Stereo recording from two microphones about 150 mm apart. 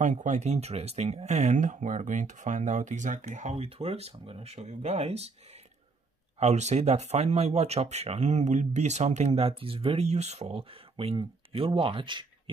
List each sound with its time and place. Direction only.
0.0 s speech: 55° right (ahead or behind)
6.4 s speech: 50° right (ahead or behind); by 12.3 s 30° right (ahead or behind)